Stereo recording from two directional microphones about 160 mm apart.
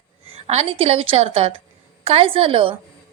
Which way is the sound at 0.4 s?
40° right (ahead or behind).